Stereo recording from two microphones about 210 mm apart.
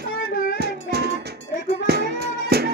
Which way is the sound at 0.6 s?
50° right (ahead or behind).